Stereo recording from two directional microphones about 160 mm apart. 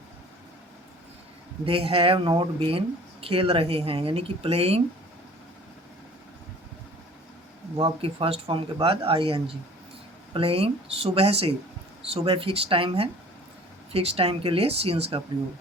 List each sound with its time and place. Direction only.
1.6 s speech: 35° right (ahead or behind)
7.8 s speech: 35° right (ahead or behind)